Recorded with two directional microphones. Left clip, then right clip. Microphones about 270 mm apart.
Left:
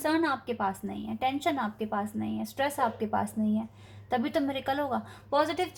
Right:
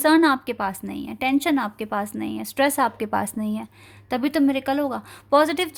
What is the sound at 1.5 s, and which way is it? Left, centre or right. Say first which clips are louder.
Speech: right 7 dB; right.